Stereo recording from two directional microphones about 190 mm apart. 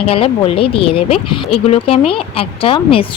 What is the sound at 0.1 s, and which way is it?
Speech, 30° left (ahead or behind).